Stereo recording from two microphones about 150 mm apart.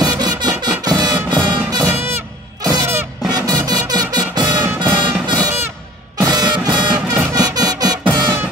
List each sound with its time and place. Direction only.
0.0 s music: 25° right (ahead or behind)